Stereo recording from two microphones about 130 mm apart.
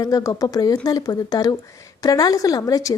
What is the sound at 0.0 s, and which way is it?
A woman's voice, 25° left (ahead or behind).